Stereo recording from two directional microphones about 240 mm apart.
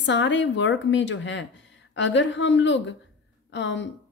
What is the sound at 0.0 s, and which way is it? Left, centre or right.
A woman's voice, left.